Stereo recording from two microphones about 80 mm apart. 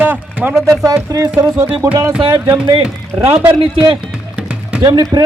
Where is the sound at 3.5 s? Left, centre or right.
Right.